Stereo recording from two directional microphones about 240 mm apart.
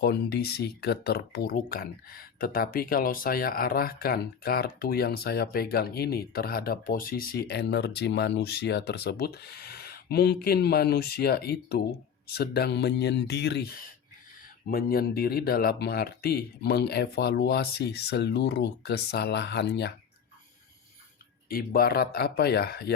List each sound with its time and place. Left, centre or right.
0.0 s speech: left
21.5 s speech: left